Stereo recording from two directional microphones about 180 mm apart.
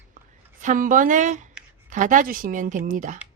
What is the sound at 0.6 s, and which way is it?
Speech, 45° right (ahead or behind).